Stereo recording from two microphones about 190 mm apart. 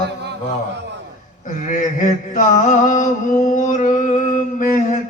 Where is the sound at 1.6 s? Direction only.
40° left (ahead or behind).